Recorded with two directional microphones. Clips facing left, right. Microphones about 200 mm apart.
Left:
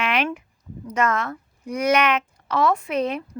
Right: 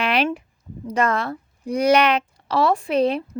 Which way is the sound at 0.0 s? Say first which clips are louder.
Right 3 dB; 35° right (ahead or behind).